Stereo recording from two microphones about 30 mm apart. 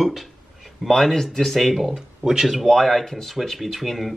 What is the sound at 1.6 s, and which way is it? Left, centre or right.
Speech, centre.